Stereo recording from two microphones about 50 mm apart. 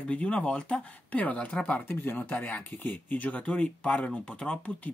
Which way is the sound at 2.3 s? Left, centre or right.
Left.